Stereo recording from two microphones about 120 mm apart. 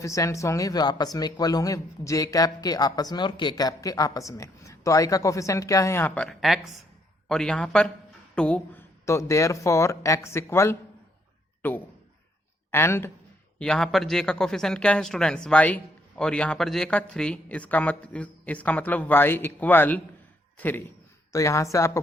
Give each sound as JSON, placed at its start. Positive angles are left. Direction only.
{"t": 0.0, "sound": "speech", "side_deg": 25}
{"t": 9.0, "sound": "speech", "side_deg": 25}
{"t": 13.6, "sound": "speech", "side_deg": 5}